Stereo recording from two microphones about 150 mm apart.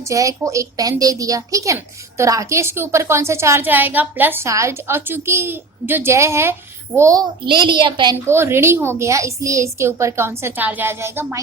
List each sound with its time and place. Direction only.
0.1 s a woman's voice: 20° right (ahead or behind)
7.4 s a woman's voice: 30° right (ahead or behind)
8.3 s a woman's voice: 15° right (ahead or behind)